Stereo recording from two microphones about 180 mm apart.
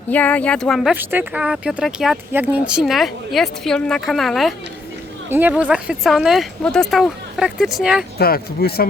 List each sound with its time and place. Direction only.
0.1 s speech: 10° left (ahead or behind)
0.9 s speech: 10° right (ahead or behind)
5.3 s speech: 10° right (ahead or behind)
8.2 s speech: 60° left (ahead or behind)